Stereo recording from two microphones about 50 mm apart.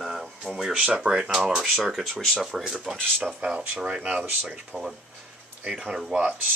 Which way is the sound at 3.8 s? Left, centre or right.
Right.